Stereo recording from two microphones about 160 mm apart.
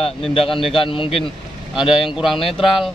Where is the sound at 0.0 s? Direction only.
35° left (ahead or behind).